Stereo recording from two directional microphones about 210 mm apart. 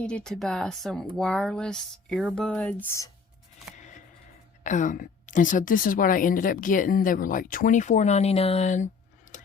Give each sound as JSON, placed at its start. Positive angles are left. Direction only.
{"t": 0.0, "sound": "speech", "side_deg": 5}
{"t": 4.6, "sound": "a woman's voice", "side_deg": 35}
{"t": 9.3, "sound": "a sound", "side_deg": 35}